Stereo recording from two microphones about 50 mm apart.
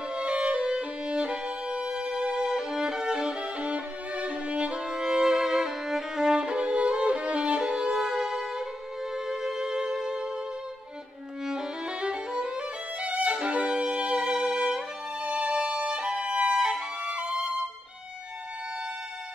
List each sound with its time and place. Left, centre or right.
0.1 s music: right
11.4 s violin: centre
16.5 s music: centre